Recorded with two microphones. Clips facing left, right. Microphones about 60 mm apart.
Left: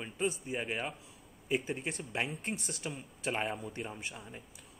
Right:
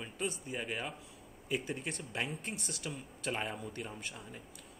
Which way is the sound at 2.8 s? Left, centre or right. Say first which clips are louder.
Left 2 dB; centre.